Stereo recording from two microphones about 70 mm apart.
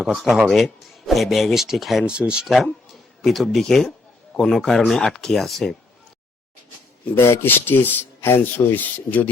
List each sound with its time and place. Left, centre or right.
0.2 s speech: centre
3.2 s speech: centre
7.2 s speech: left
7.4 s speech: left